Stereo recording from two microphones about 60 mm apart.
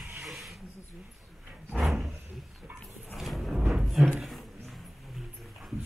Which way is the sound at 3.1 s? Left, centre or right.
Centre.